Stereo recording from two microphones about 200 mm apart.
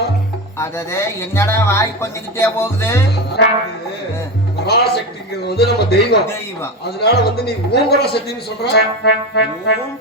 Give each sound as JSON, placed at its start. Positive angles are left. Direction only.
{"t": 0.6, "sound": "speech", "side_deg": 15}
{"t": 4.6, "sound": "a man's voice", "side_deg": 55}
{"t": 8.7, "sound": "music", "side_deg": 55}